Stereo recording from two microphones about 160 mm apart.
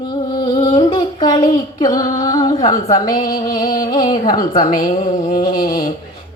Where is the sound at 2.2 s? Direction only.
20° left (ahead or behind).